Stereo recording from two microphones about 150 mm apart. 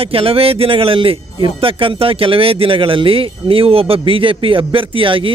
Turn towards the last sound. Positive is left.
turn(degrees=-35)  # may be behind; listen again after turning